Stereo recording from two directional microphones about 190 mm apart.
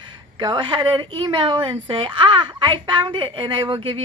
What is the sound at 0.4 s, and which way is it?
A woman's voice, 25° right (ahead or behind).